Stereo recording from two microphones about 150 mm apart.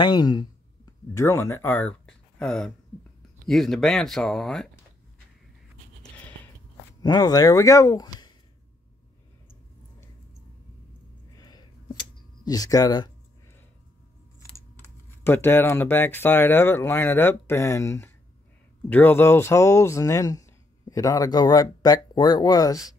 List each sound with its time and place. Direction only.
0.0 s speech: 30° left (ahead or behind); by 4.6 s 5° left (ahead or behind)
6.0 s a sound: 10° left (ahead or behind)
7.0 s speech: 25° left (ahead or behind)
11.3 s a sound: 25° left (ahead or behind)
12.4 s speech: 25° left (ahead or behind)
14.8 s speech: 15° left (ahead or behind)